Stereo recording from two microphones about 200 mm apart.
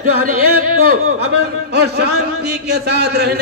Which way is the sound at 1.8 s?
55° right (ahead or behind).